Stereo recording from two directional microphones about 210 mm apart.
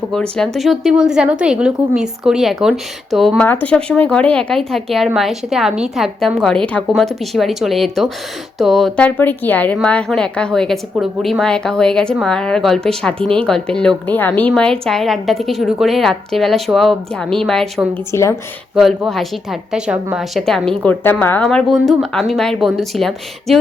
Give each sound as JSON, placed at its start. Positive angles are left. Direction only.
{"t": 0.1, "sound": "a woman's voice", "side_deg": 5}
{"t": 18.1, "sound": "speech", "side_deg": 15}
{"t": 18.8, "sound": "a woman's voice", "side_deg": 0}